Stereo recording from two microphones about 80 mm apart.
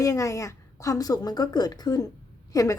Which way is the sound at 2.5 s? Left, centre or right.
Left.